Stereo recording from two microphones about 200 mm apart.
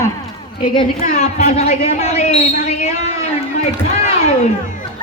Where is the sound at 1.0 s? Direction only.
40° left (ahead or behind).